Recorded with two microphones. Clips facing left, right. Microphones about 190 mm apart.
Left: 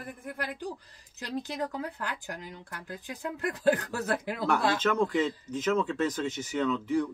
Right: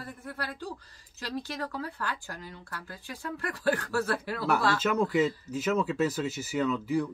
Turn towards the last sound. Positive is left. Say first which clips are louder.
# even
turn(degrees=-5)  # may be behind; listen again after turning